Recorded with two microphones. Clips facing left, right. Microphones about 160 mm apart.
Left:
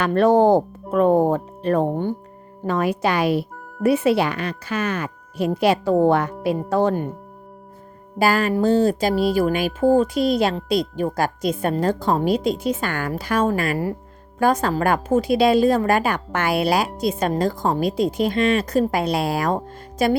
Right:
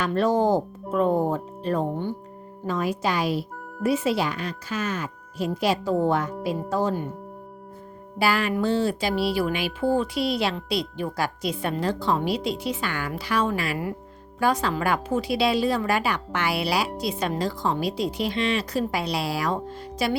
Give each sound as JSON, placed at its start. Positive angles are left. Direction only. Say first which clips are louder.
{"t": 0.0, "sound": "a woman's voice", "louder": "left 6 dB", "side_deg": 60}
{"t": 8.2, "sound": "a woman's voice", "louder": "left 5 dB", "side_deg": 45}